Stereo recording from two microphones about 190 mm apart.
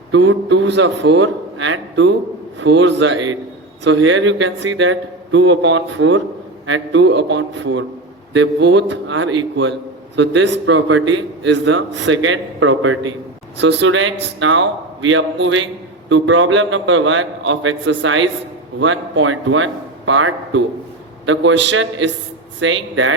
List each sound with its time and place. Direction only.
0.1 s a man's voice: 75° right (ahead or behind)
3.8 s a man's voice: 85° right
10.2 s a man's voice: 70° right (ahead or behind); by 13.0 s 90° right
13.6 s a man's voice: 70° right (ahead or behind); by 20.7 s 85° right
21.2 s a man's voice: 75° right (ahead or behind)